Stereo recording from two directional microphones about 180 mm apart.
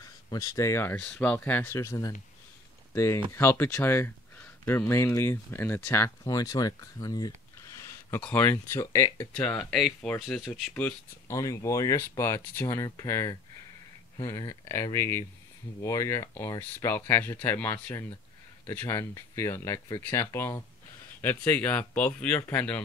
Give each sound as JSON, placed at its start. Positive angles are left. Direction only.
{"t": 0.0, "sound": "speech", "side_deg": 20}
{"t": 9.3, "sound": "speech", "side_deg": 5}